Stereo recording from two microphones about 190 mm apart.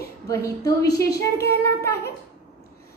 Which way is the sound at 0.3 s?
15° left (ahead or behind).